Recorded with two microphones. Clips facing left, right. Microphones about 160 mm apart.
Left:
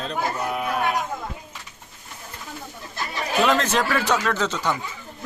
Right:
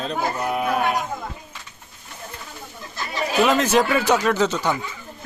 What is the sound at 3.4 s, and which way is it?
Speech, 10° right (ahead or behind).